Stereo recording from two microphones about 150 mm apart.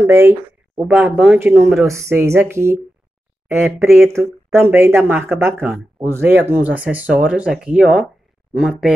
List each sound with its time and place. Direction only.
0.0 s speech: 15° right (ahead or behind)